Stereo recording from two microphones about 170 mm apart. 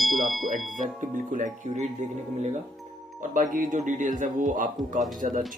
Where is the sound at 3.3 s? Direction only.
55° right (ahead or behind).